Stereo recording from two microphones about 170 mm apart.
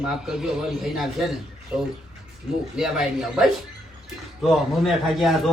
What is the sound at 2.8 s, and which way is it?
A man's voice, centre (ahead or behind).